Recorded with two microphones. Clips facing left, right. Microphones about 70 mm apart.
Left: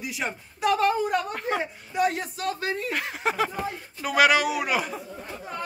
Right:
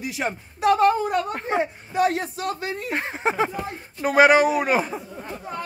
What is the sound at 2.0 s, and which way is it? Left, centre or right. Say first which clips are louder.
Speech: right 3 dB; right.